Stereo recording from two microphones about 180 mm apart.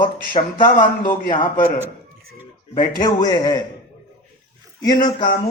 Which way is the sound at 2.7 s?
55° left (ahead or behind).